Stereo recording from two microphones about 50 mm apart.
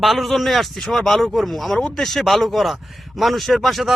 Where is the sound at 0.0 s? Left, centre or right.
Centre.